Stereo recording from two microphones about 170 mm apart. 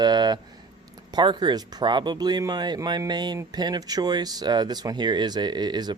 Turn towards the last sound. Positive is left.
turn(degrees=-25)  # may be behind; listen again after turning